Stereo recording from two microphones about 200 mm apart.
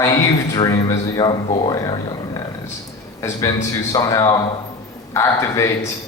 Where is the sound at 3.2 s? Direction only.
15° left (ahead or behind).